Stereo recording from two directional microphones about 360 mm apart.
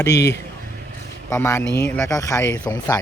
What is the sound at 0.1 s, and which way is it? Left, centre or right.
Speech, left.